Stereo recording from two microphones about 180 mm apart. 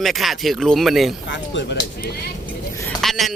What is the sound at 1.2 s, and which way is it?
Speech, 90° left.